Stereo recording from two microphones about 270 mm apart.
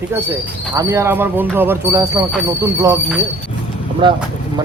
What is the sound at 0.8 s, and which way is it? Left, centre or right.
Speech, centre.